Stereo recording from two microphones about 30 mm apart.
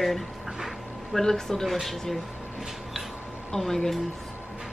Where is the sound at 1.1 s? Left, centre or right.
Centre.